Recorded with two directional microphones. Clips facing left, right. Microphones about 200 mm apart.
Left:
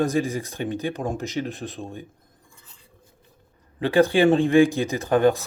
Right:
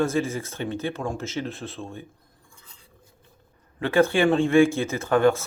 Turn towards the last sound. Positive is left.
turn(degrees=15)  # may be behind; listen again after turning